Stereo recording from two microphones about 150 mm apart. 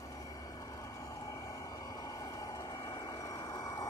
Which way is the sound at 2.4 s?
25° left (ahead or behind).